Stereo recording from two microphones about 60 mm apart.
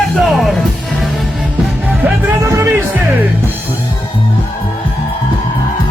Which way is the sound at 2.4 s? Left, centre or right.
Right.